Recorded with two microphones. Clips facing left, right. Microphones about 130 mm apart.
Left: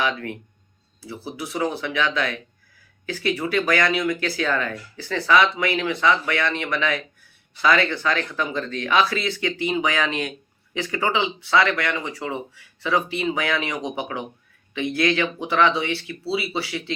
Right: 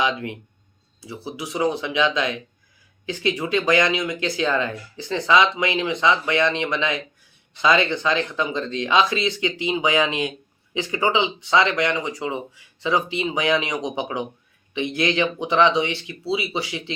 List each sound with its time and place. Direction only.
0.0 s speech: 20° right (ahead or behind)